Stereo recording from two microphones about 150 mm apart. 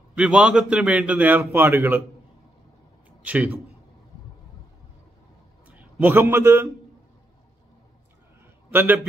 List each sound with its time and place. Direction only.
0.1 s a man's voice: 5° right (ahead or behind)
3.3 s a man's voice: 10° right (ahead or behind)
5.8 s a man's voice: 10° right (ahead or behind)
8.7 s a man's voice: 15° right (ahead or behind)